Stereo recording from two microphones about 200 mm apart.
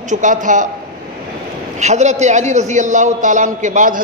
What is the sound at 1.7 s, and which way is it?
A man's voice, 35° right (ahead or behind).